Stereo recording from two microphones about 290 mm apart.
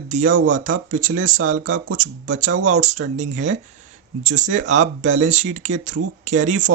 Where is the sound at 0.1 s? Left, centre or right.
Right.